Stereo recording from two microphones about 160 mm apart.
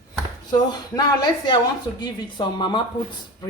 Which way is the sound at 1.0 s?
25° left (ahead or behind).